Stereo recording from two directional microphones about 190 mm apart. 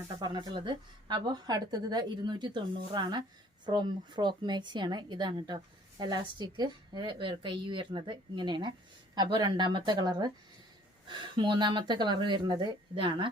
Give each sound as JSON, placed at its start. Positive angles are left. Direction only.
{"t": 0.2, "sound": "a woman's voice", "side_deg": -20}